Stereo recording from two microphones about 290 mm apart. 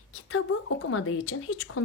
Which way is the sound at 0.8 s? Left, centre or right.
Left.